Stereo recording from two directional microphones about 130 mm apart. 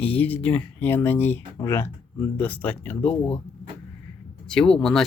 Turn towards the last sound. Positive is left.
turn(degrees=5)  # may be behind; listen again after turning